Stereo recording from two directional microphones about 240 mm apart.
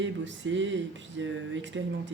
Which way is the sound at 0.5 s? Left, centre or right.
Right.